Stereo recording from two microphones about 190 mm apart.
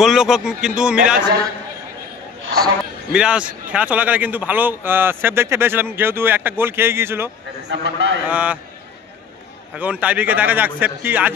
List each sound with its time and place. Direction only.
0.0 s a man's voice: centre (ahead or behind)
3.1 s a man's voice: 5° right (ahead or behind)
7.6 s a man's voice: 75° right (ahead or behind)
8.3 s a man's voice: 5° right (ahead or behind)
9.8 s a man's voice: 5° right (ahead or behind)